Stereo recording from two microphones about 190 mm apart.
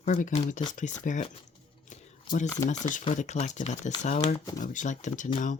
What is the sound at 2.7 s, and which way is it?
Speech, 40° left (ahead or behind).